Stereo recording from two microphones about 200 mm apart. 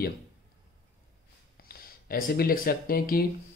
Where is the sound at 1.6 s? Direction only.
45° left (ahead or behind).